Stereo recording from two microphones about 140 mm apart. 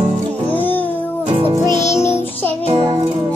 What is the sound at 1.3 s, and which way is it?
Music, 40° right (ahead or behind).